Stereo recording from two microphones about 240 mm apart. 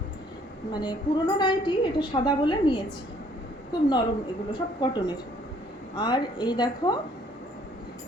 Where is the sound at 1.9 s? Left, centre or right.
Centre.